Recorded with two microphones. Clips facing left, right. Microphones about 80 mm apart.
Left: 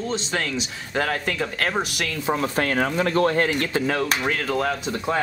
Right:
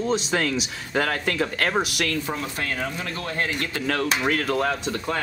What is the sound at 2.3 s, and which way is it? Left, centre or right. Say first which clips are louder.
Speech: left 6 dB; left.